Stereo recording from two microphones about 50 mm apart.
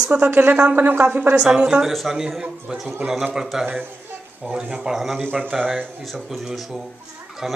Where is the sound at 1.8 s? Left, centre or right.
Centre.